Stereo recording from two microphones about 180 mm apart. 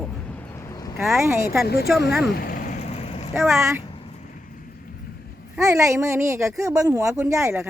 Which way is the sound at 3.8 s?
30° left (ahead or behind).